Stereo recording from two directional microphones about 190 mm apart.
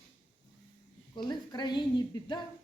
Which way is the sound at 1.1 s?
20° left (ahead or behind).